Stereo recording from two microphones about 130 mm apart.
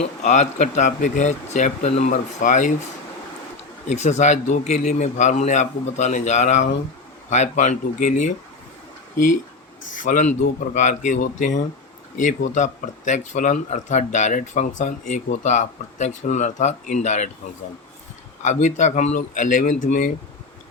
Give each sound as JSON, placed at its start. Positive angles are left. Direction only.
{"t": 0.0, "sound": "speech", "side_deg": 65}
{"t": 3.8, "sound": "a man's voice", "side_deg": 60}
{"t": 18.4, "sound": "speech", "side_deg": 65}